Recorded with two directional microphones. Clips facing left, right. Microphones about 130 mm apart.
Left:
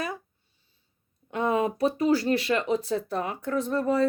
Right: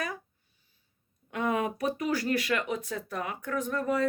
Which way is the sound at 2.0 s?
30° left (ahead or behind).